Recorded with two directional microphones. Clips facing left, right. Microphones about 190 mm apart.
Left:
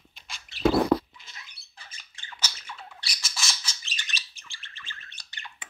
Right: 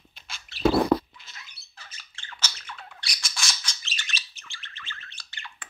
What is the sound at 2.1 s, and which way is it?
Squawk, 15° left (ahead or behind).